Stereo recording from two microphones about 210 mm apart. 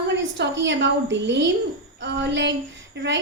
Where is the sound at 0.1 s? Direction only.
55° right (ahead or behind).